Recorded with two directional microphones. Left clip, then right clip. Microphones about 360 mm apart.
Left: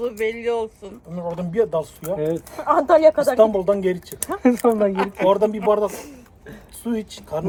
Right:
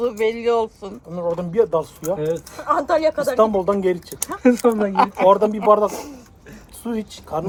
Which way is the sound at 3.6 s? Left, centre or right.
Centre.